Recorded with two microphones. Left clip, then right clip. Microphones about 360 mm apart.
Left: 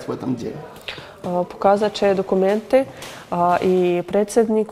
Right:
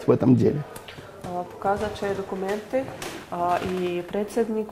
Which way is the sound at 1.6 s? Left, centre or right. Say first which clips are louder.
Left 9 dB; left.